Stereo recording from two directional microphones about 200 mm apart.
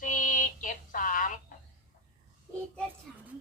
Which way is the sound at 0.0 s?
40° left (ahead or behind).